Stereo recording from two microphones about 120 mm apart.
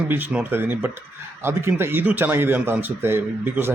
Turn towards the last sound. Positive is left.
turn(degrees=-20)  # may be behind; listen again after turning